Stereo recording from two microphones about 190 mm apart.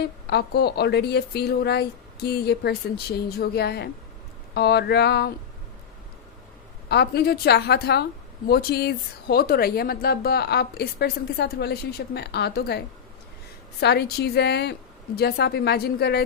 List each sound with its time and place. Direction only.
0.0 s a woman's voice: 60° left (ahead or behind)
6.8 s a woman's voice: 60° left (ahead or behind)